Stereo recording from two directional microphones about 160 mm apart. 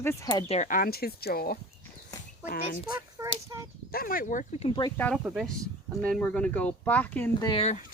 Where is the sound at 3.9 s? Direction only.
65° left (ahead or behind).